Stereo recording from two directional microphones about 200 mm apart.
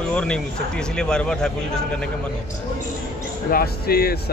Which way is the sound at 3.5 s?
50° left (ahead or behind).